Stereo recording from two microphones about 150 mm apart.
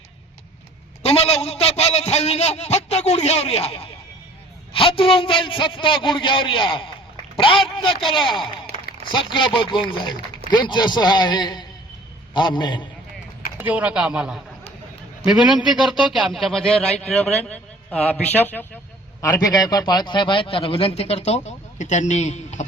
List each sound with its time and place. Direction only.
1.0 s a man's voice: 45° left (ahead or behind)
13.6 s a man's voice: 10° right (ahead or behind); by 22.6 s 50° left (ahead or behind)